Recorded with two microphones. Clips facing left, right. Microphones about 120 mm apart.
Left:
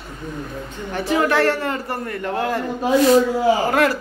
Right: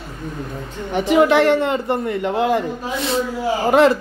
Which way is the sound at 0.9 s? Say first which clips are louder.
Right 5 dB; 15° right (ahead or behind).